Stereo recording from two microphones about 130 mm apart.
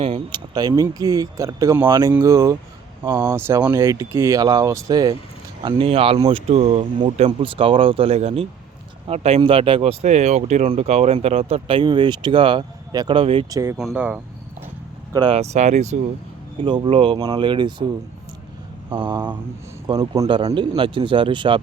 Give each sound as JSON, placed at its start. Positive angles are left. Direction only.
{"t": 0.3, "sound": "speech", "side_deg": -35}
{"t": 5.6, "sound": "speech", "side_deg": -45}
{"t": 13.1, "sound": "speech", "side_deg": -45}
{"t": 13.5, "sound": "speech", "side_deg": -25}
{"t": 13.7, "sound": "speech", "side_deg": -5}
{"t": 15.3, "sound": "speech", "side_deg": -60}
{"t": 16.6, "sound": "speech", "side_deg": -40}
{"t": 18.9, "sound": "speech", "side_deg": -35}